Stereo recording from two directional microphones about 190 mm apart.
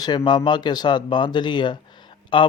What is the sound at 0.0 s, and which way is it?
Speech, 20° left (ahead or behind).